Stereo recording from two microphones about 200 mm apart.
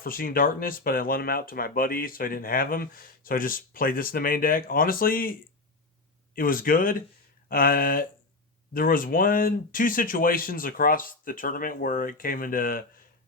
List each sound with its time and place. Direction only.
0.0 s speech: 45° left (ahead or behind)